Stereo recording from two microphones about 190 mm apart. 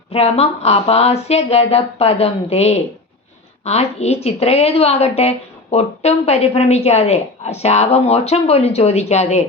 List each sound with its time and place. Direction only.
0.1 s a woman's voice: 30° left (ahead or behind)